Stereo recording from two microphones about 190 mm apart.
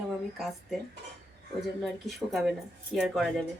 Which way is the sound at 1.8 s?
Centre (ahead or behind).